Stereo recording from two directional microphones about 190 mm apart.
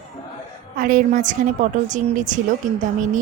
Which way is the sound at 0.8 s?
45° right (ahead or behind).